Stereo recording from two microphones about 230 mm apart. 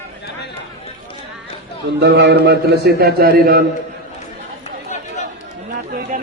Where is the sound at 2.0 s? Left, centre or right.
Right.